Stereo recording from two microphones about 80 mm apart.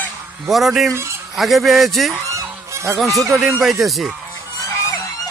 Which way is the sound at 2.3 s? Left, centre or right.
Right.